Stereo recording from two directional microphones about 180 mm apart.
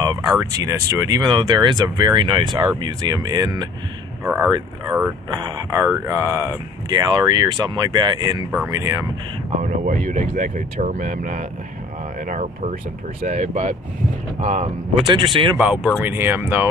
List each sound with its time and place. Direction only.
0.0 s speech: 20° right (ahead or behind)
9.6 s speech: 45° right (ahead or behind)
13.2 s speech: 45° right (ahead or behind)
15.0 s speech: 25° right (ahead or behind)
15.5 s speech: 5° right (ahead or behind)